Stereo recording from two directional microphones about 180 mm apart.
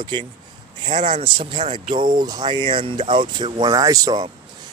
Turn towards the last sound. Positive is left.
turn(degrees=-20)  # may be behind; listen again after turning